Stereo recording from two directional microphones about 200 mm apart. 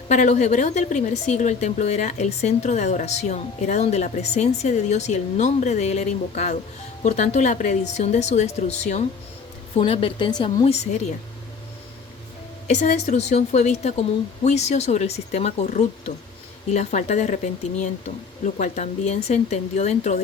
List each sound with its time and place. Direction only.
0.1 s speech: 35° left (ahead or behind)
12.6 s speech: 40° left (ahead or behind)